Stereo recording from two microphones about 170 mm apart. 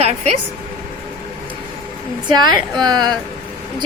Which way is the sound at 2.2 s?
25° right (ahead or behind).